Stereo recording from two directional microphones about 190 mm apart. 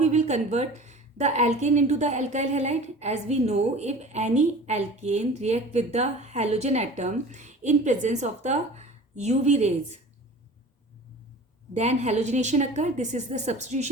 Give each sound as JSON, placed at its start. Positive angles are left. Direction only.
{"t": 0.0, "sound": "a woman's voice", "side_deg": -35}
{"t": 11.7, "sound": "a woman's voice", "side_deg": -35}